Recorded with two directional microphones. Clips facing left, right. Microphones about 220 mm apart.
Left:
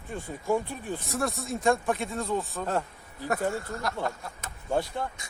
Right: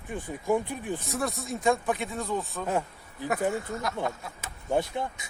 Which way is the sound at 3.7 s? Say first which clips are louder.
Right 1 dB; centre (ahead or behind).